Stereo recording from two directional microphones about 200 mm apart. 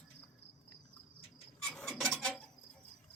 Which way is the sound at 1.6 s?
5° left (ahead or behind).